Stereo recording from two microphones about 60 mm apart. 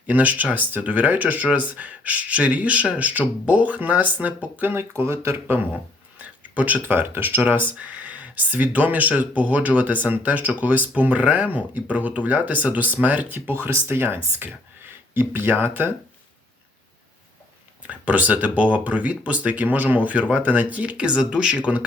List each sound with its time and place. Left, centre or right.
0.1 s speech: right
4.5 s speech: right
6.2 s speech: right
17.8 s speech: right